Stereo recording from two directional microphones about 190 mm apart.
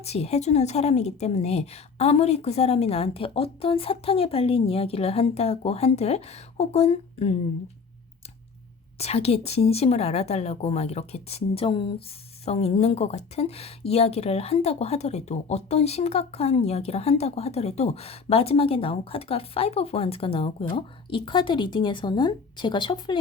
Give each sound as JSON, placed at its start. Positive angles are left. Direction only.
{"t": 0.0, "sound": "a woman's voice", "side_deg": 35}
{"t": 9.0, "sound": "a woman's voice", "side_deg": 35}